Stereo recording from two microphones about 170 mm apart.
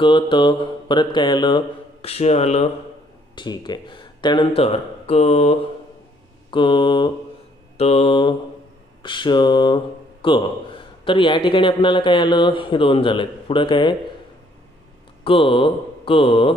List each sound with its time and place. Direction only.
0.0 s a man's voice: 30° left (ahead or behind)
3.3 s a man's voice: 25° left (ahead or behind); by 5.6 s 40° left (ahead or behind)
6.5 s a man's voice: 30° left (ahead or behind)
7.7 s mantra: 35° left (ahead or behind)
9.0 s a man's voice: 25° left (ahead or behind)
15.2 s mantra: 30° left (ahead or behind)